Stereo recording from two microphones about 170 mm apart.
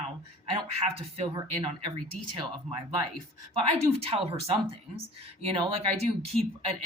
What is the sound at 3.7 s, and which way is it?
Speech, 35° right (ahead or behind).